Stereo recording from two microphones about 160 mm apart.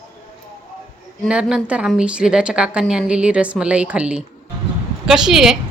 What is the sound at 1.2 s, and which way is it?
A woman's voice, 5° right (ahead or behind).